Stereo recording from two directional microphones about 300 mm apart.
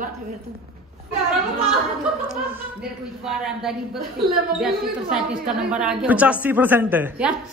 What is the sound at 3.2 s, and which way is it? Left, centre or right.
A man's voice, centre.